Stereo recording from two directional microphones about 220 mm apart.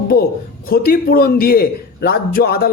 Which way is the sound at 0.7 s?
40° left (ahead or behind).